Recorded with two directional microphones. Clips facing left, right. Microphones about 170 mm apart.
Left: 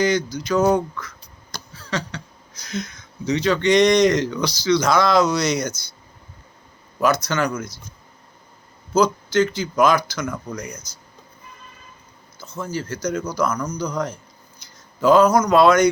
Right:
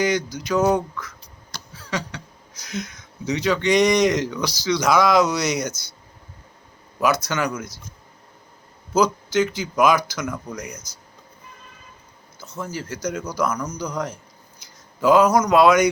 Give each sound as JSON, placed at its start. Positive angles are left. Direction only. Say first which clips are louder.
{"t": 0.3, "sound": "speech", "louder": "left 1 dB", "side_deg": -15}
{"t": 1.8, "sound": "a sound", "louder": "left 1 dB", "side_deg": -15}
{"t": 2.6, "sound": "speech", "louder": "left 2 dB", "side_deg": -10}
{"t": 7.3, "sound": "speech", "louder": "left 2 dB", "side_deg": -10}
{"t": 9.0, "sound": "speech", "louder": "left 2 dB", "side_deg": -10}
{"t": 12.4, "sound": "speech", "louder": "left 3 dB", "side_deg": -10}